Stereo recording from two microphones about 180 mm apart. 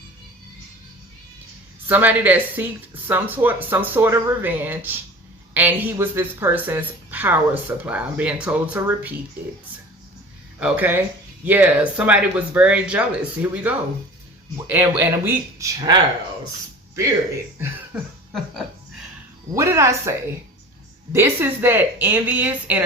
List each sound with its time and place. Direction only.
1.9 s a woman's voice: 10° right (ahead or behind)
10.6 s a woman's voice: 10° right (ahead or behind)
19.5 s a woman's voice: 15° right (ahead or behind)